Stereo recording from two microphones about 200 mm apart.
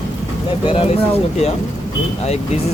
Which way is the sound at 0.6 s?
30° left (ahead or behind).